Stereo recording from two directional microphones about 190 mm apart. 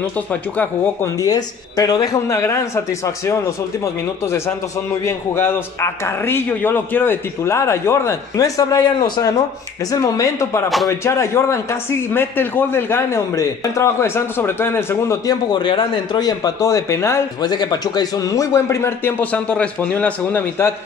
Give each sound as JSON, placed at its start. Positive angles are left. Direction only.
{"t": 0.3, "sound": "a man's voice", "side_deg": 10}
{"t": 3.8, "sound": "a man's voice", "side_deg": 15}